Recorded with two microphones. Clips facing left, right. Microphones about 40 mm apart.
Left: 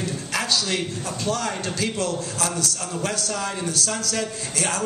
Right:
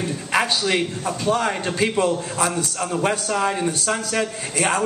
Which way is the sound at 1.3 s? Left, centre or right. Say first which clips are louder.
Right 6 dB; right.